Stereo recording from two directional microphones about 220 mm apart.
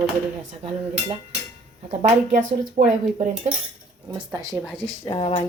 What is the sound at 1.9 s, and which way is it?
Speech, 30° right (ahead or behind).